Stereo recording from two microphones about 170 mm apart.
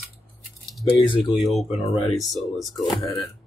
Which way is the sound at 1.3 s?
Centre (ahead or behind).